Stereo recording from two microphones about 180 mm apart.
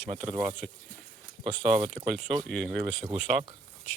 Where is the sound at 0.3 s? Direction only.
Centre (ahead or behind).